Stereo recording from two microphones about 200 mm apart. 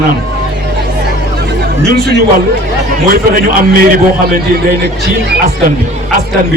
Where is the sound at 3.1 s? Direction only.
45° right (ahead or behind).